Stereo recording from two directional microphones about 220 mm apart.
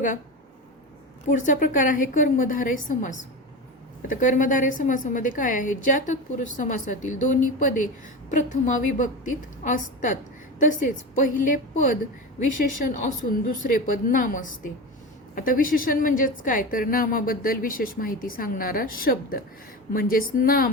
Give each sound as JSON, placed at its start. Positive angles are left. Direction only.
{"t": 1.3, "sound": "a woman's voice", "side_deg": 35}